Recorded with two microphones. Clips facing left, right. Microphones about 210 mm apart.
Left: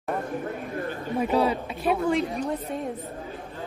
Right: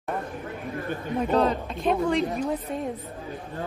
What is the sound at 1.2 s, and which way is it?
A man's voice, 10° left (ahead or behind).